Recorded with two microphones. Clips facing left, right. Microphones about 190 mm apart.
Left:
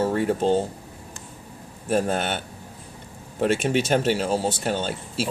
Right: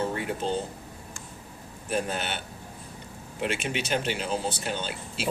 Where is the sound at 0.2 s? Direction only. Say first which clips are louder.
Left 8 dB; 45° left (ahead or behind).